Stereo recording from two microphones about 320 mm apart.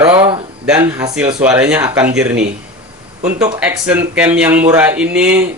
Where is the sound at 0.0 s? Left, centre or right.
Centre.